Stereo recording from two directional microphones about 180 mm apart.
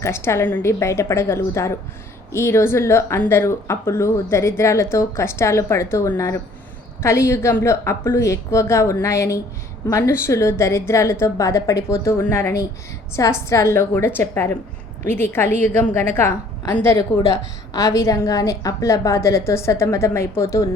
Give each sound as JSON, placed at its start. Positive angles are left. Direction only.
{"t": 0.0, "sound": "a woman's voice", "side_deg": 15}